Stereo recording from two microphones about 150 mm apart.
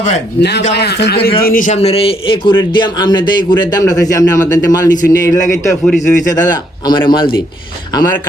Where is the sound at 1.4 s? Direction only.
65° left (ahead or behind); by 4.9 s 25° left (ahead or behind).